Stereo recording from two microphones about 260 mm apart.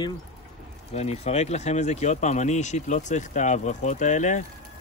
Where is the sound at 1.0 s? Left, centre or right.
Left.